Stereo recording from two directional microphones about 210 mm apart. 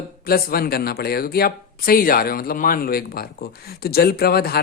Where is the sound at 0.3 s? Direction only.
45° left (ahead or behind).